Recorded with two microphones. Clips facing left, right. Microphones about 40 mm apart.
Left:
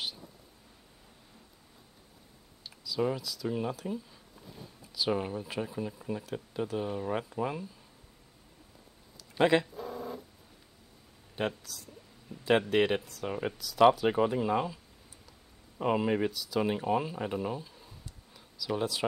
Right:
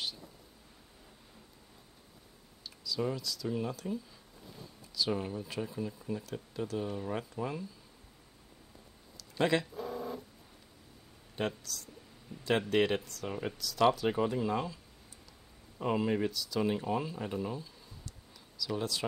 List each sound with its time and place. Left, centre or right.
2.6 s speech: centre
9.4 s speech: centre
9.7 s a sound: centre
11.3 s speech: centre
15.8 s speech: centre